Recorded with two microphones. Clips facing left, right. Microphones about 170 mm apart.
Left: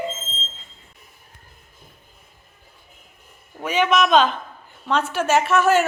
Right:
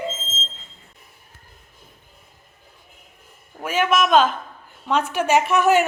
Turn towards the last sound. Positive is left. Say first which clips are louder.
# even
turn(degrees=-15)  # may be behind; listen again after turning